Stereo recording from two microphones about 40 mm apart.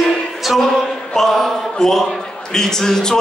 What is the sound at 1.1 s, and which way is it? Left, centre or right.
Speech, centre.